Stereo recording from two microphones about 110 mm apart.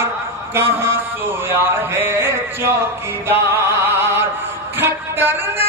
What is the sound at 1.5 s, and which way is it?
Speech, 20° right (ahead or behind).